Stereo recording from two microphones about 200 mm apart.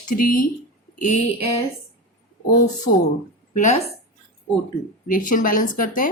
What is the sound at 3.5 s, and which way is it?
Speech, 40° left (ahead or behind).